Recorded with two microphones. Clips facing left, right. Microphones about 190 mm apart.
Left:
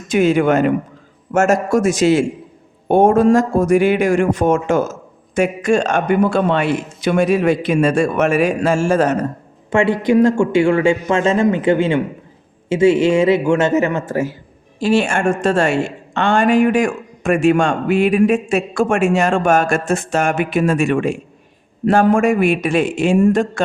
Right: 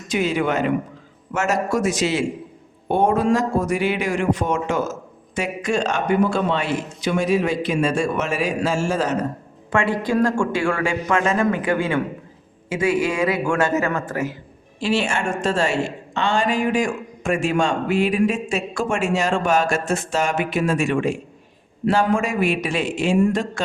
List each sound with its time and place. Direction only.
0.1 s a man's voice: 50° left (ahead or behind)
9.6 s a man's voice: 25° left (ahead or behind)
14.8 s a woman's voice: 45° left (ahead or behind)